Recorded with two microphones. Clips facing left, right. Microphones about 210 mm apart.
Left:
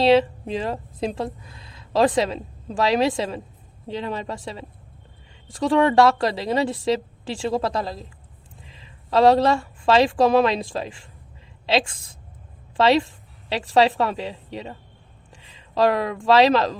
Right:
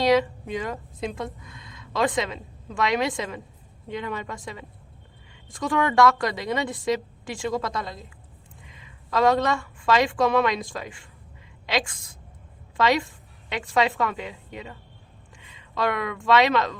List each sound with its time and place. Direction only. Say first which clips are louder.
0.0 s a woman's voice: left 4 dB; 30° left (ahead or behind)